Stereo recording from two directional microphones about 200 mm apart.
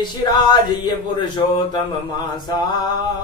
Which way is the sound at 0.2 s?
20° left (ahead or behind).